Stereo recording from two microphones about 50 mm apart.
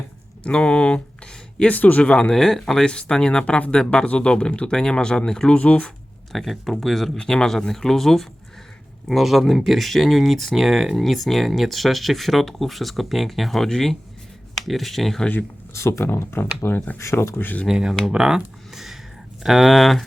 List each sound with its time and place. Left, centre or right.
0.4 s a sound: left
1.7 s speech: left
2.0 s speech: centre
5.5 s speech: left
6.3 s speech: centre
7.2 s speech: centre
15.7 s speech: left
16.0 s speech: left
16.7 s speech: left
17.0 s speech: left
17.3 s speech: left
17.7 s speech: centre
18.1 s a sound: centre
19.4 s speech: centre